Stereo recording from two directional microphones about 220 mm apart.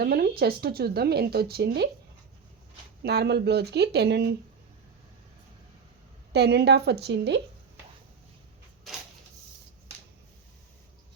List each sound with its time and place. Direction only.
0.0 s speech: 45° right (ahead or behind)
3.0 s speech: 50° right (ahead or behind)
6.3 s speech: 50° right (ahead or behind)